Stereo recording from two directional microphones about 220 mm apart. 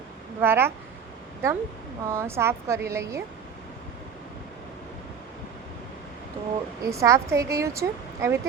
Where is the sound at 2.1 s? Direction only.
10° right (ahead or behind).